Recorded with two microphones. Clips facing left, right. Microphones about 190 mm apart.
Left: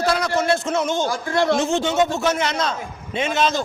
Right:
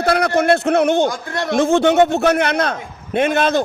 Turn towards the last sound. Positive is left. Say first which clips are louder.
# right 5 dB
turn(degrees=-55)  # may be behind; listen again after turning